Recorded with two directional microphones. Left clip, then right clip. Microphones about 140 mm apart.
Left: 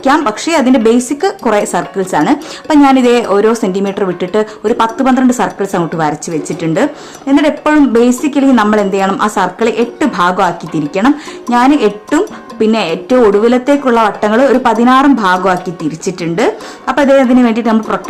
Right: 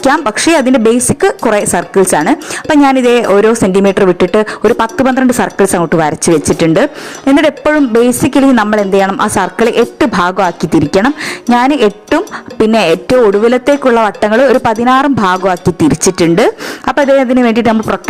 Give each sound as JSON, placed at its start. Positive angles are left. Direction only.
{"t": 0.0, "sound": "speech", "side_deg": -50}
{"t": 2.3, "sound": "speech", "side_deg": -35}